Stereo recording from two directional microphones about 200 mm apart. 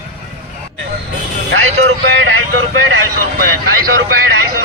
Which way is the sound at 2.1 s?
75° right (ahead or behind).